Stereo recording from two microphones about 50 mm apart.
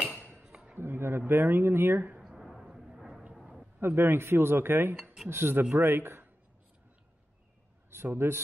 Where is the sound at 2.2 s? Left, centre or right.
Centre.